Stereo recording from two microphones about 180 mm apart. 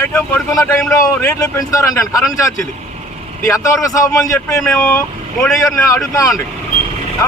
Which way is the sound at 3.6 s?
20° left (ahead or behind).